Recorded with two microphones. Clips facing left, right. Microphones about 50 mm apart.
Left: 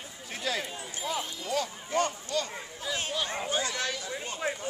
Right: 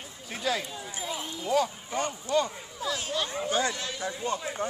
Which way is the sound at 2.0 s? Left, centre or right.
Right.